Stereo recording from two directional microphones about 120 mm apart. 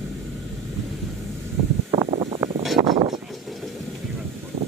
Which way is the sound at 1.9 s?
50° right (ahead or behind).